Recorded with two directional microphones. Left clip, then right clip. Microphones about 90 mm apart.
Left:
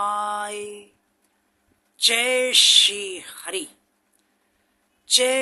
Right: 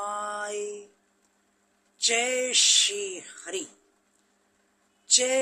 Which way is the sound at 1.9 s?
30° left (ahead or behind).